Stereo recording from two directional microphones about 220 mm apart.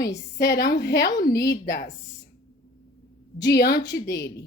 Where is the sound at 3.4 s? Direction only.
45° left (ahead or behind).